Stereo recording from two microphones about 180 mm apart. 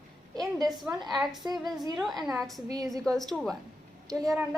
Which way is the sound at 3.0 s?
Centre (ahead or behind).